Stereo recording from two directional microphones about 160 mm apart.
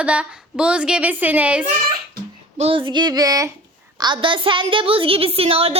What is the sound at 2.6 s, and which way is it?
Female singing, 35° right (ahead or behind).